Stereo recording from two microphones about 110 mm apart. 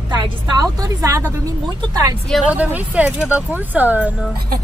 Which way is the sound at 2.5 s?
15° right (ahead or behind).